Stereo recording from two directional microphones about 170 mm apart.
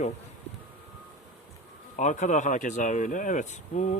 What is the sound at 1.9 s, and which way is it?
Speech, 45° left (ahead or behind).